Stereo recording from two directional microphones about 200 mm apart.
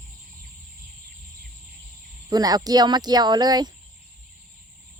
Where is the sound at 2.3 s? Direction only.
20° right (ahead or behind).